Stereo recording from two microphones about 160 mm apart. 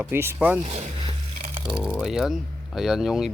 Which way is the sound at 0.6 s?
45° right (ahead or behind).